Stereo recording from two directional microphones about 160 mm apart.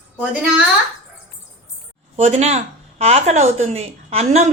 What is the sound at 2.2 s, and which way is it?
Speech, 45° right (ahead or behind).